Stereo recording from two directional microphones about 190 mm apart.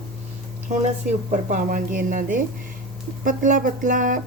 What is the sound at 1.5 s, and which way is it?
A woman's voice, 45° right (ahead or behind).